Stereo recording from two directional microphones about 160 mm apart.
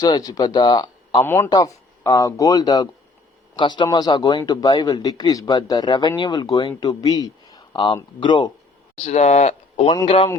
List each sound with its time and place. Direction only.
0.0 s speech: 25° left (ahead or behind)
1.2 s a man's voice: 15° left (ahead or behind); by 8.5 s 30° left (ahead or behind)
9.0 s speech: 45° left (ahead or behind)
9.9 s speech: 30° left (ahead or behind)